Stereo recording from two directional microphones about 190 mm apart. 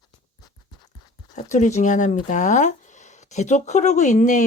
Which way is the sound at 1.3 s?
40° left (ahead or behind).